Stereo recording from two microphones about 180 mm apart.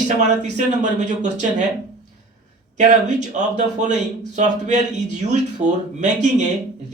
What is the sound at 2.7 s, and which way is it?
A man's voice, 40° right (ahead or behind).